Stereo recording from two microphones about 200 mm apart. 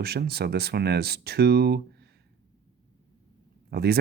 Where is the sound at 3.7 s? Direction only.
50° right (ahead or behind).